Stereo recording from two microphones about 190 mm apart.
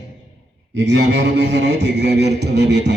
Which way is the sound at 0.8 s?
65° right (ahead or behind).